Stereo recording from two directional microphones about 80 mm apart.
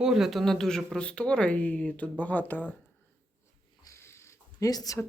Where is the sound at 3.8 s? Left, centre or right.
Left.